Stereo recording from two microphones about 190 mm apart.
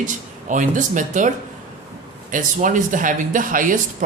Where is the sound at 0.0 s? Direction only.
45° right (ahead or behind).